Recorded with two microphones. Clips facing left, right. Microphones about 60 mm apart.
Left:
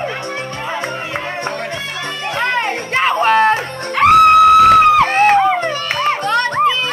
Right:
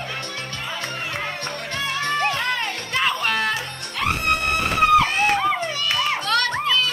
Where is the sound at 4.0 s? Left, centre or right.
Left.